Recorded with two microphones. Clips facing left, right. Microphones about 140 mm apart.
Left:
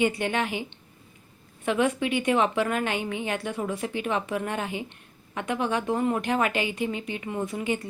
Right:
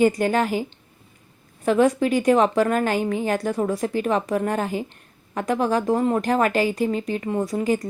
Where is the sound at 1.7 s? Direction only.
35° right (ahead or behind).